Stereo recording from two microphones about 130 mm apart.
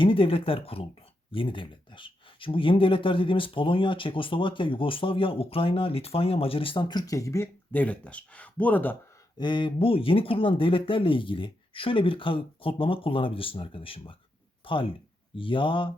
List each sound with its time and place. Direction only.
0.0 s speech: 45° left (ahead or behind); by 9.0 s 15° left (ahead or behind)
9.4 s speech: 40° left (ahead or behind)